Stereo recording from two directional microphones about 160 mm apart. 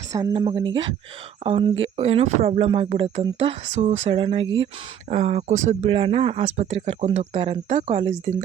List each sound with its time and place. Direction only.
0.1 s speech: 20° right (ahead or behind); by 4.2 s 45° right (ahead or behind)
4.2 s speech: 35° right (ahead or behind)
5.9 s speech: 35° right (ahead or behind)